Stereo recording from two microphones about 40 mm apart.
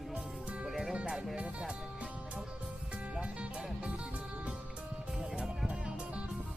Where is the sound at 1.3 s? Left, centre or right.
Right.